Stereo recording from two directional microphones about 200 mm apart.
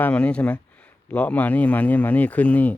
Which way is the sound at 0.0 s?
5° left (ahead or behind).